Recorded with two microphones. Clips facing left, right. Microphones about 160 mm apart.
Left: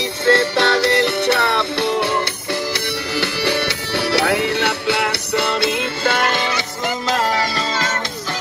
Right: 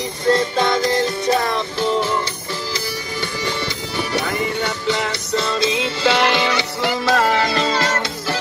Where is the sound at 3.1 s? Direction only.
75° left (ahead or behind); by 6.2 s 55° left (ahead or behind).